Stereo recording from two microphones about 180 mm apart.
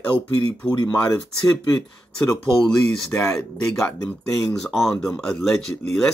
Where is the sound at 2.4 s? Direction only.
5° left (ahead or behind).